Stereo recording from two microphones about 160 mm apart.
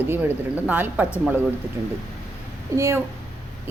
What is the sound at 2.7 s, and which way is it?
Speech, 15° right (ahead or behind).